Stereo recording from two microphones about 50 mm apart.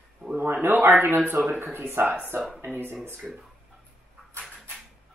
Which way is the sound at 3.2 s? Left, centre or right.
Centre.